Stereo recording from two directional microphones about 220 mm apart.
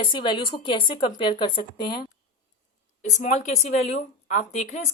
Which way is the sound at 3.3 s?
30° left (ahead or behind).